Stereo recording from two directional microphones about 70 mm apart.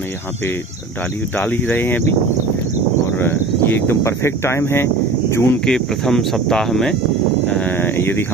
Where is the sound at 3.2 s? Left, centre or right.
Left.